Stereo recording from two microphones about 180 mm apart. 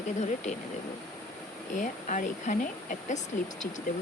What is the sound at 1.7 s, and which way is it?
Speech, 45° left (ahead or behind).